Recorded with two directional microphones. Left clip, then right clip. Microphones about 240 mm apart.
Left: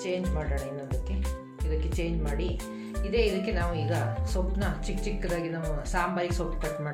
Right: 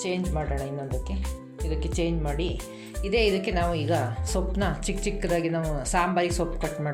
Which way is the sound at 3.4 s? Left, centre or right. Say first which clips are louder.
Right 5 dB; right.